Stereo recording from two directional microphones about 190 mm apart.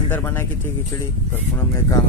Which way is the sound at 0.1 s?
10° left (ahead or behind).